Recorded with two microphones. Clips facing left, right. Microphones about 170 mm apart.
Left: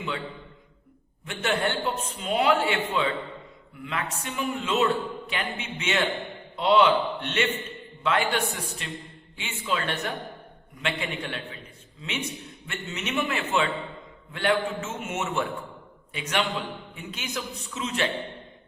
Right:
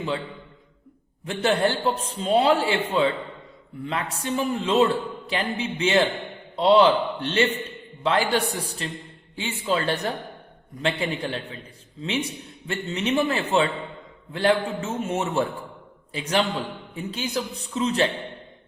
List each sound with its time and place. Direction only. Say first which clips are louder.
1.2 s a man's voice: right 5 dB; 35° right (ahead or behind)